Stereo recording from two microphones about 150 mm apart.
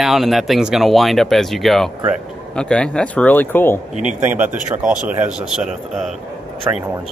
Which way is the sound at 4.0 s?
55° right (ahead or behind).